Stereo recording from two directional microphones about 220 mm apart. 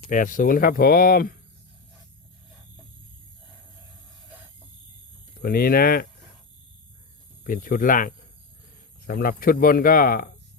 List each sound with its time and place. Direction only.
0.1 s speech: 35° left (ahead or behind)
5.4 s speech: 45° left (ahead or behind)
7.4 s speech: 40° left (ahead or behind)